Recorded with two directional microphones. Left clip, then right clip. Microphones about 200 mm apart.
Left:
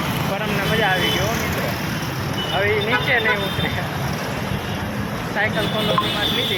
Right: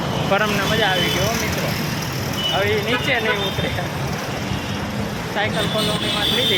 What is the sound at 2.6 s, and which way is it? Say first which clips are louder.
Speech: left 2 dB; 20° right (ahead or behind).